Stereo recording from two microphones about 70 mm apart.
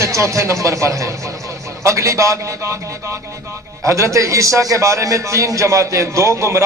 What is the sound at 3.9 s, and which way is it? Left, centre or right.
A man's voice, right.